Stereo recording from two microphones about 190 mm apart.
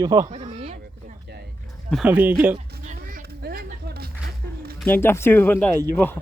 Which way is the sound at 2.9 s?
50° right (ahead or behind).